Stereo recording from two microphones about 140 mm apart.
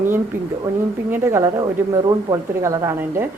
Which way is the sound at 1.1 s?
15° right (ahead or behind).